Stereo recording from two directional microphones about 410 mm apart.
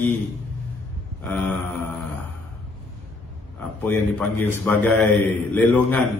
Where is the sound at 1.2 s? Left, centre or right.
Centre.